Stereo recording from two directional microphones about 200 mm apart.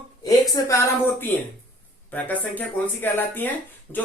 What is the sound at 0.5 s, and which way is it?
A man's voice, 15° left (ahead or behind).